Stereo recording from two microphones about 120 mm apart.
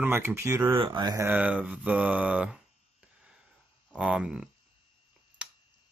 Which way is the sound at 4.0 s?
5° right (ahead or behind).